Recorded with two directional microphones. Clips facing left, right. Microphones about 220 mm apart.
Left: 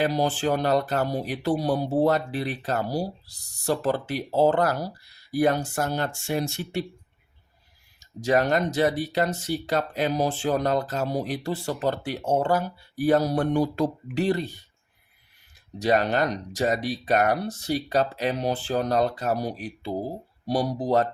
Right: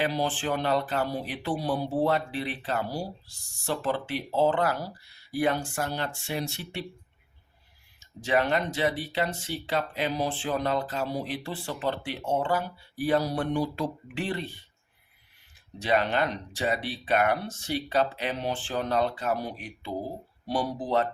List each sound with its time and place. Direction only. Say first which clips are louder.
0.0 s speech: left 4 dB; 40° left (ahead or behind)
7.9 s speech: left 4 dB; 40° left (ahead or behind)
15.8 s speech: left 3 dB; 40° left (ahead or behind)